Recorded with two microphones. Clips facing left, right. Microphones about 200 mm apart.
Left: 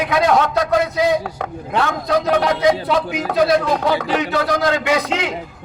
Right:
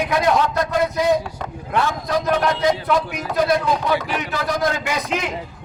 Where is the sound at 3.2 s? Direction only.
70° left (ahead or behind).